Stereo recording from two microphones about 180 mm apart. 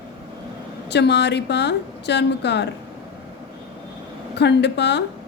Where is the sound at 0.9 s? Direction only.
70° left (ahead or behind).